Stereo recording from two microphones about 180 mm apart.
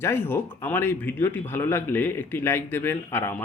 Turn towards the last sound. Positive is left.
turn(degrees=10)  # may be behind; listen again after turning